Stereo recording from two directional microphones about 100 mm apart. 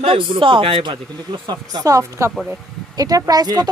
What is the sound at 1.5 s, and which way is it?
Speech, 40° right (ahead or behind).